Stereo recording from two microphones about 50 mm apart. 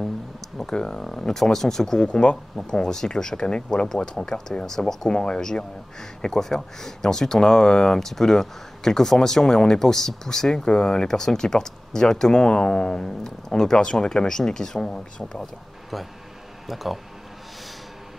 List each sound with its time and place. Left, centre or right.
0.6 s speech: centre
2.0 s speech: left
16.6 s speech: centre